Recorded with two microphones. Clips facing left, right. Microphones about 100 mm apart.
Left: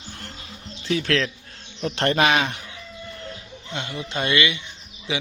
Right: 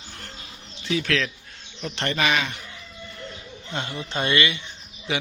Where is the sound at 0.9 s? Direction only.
35° left (ahead or behind).